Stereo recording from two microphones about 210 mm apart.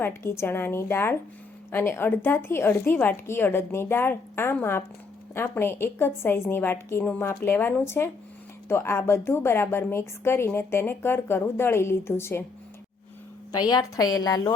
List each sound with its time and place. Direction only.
0.2 s a woman's voice: 10° left (ahead or behind)
13.5 s a woman's voice: 20° left (ahead or behind)